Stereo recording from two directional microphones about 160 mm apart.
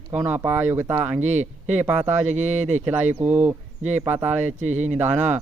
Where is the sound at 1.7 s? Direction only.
10° right (ahead or behind).